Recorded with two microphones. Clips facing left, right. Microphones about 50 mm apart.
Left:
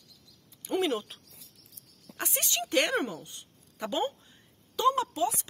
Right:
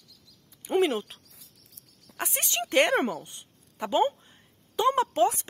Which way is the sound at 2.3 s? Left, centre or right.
Right.